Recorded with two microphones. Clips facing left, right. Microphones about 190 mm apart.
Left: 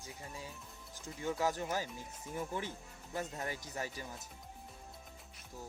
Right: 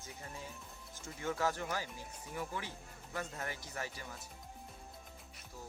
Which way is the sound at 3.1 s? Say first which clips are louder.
Left 2 dB; 20° left (ahead or behind).